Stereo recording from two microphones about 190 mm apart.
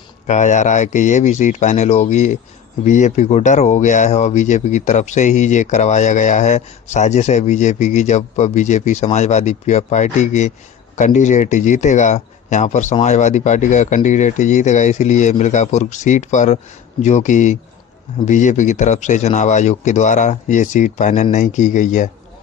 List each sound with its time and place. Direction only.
0.3 s speech: 40° left (ahead or behind)